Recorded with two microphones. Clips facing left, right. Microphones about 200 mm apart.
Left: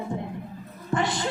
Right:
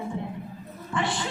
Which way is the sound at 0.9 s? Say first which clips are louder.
Left 3 dB; 40° left (ahead or behind).